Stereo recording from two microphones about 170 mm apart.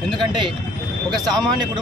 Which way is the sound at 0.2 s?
25° right (ahead or behind).